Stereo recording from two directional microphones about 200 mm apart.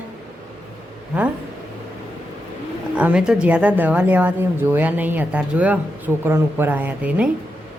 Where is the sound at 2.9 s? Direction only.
5° right (ahead or behind).